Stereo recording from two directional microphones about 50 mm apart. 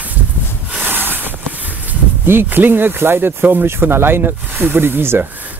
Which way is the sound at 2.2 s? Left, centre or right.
Right.